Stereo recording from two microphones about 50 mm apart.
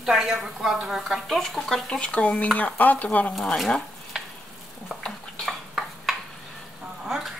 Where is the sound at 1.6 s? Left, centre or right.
Centre.